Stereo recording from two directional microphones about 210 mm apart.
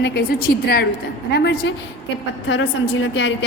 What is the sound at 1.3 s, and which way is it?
A woman's voice, 55° left (ahead or behind).